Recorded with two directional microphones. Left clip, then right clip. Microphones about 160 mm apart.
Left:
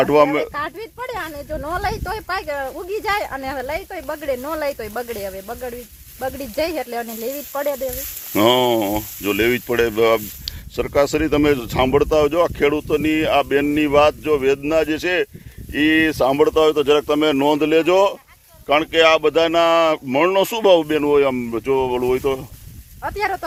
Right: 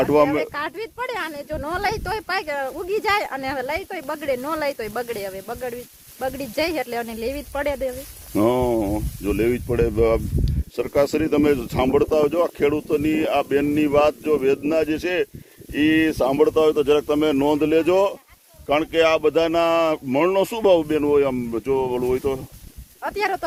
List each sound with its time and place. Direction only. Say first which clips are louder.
0.0 s speech: left 3 dB; centre (ahead or behind)
1.1 s speech: left 1 dB; 25° right (ahead or behind)
3.0 s speech: left 1 dB; 35° right (ahead or behind)
6.6 s speech: left 1 dB; 15° right (ahead or behind)
7.5 s speech: left 2 dB; 30° right (ahead or behind)
8.3 s speech: left 4 dB; centre (ahead or behind); by 22.4 s 20° left (ahead or behind)
23.0 s speech: left 1 dB; 40° right (ahead or behind)